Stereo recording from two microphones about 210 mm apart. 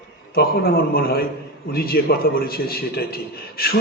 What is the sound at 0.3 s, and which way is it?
A man's voice, 45° left (ahead or behind).